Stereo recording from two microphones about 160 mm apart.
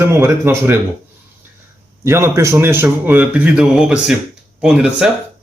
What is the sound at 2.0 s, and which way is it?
A man's voice, 15° right (ahead or behind).